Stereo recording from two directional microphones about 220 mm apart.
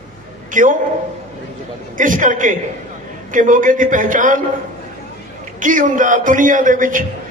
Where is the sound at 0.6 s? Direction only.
35° right (ahead or behind).